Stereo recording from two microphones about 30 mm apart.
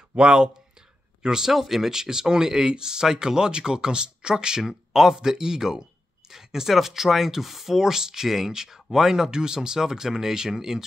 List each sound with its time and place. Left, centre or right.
0.1 s speech: right
1.2 s speech: right
1.5 s speech: centre; by 4.6 s right
4.6 s speech: centre